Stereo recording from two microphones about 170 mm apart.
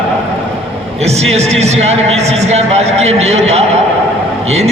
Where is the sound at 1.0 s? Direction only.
40° right (ahead or behind).